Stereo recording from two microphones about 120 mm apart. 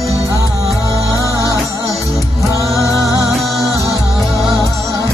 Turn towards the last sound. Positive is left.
turn(degrees=0)  # may be behind; listen again after turning